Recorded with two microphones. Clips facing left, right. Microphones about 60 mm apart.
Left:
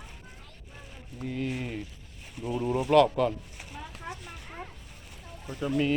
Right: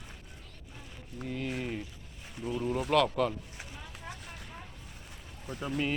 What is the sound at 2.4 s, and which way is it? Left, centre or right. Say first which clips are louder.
Speech: left 3 dB; centre.